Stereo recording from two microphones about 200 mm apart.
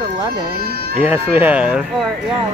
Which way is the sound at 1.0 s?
10° right (ahead or behind).